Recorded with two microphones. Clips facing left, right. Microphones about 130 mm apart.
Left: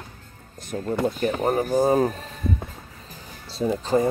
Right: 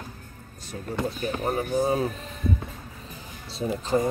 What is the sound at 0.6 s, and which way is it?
Speech, 50° left (ahead or behind).